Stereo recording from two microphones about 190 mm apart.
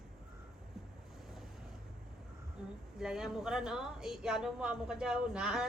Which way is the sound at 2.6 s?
5° right (ahead or behind).